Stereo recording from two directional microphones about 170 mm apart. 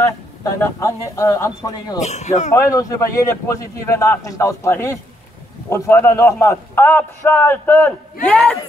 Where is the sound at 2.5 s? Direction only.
20° left (ahead or behind).